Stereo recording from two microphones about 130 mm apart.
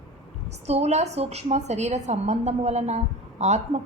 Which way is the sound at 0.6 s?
55° right (ahead or behind).